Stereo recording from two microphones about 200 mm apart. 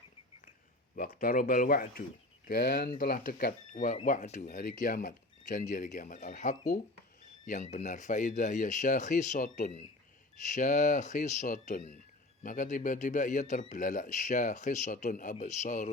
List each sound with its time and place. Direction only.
0.9 s a man's voice: 45° left (ahead or behind)